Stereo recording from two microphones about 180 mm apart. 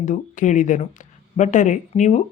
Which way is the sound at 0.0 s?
45° left (ahead or behind).